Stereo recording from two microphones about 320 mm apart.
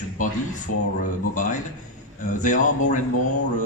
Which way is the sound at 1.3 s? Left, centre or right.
Left.